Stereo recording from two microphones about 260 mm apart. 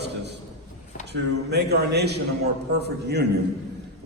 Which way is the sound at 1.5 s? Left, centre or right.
Right.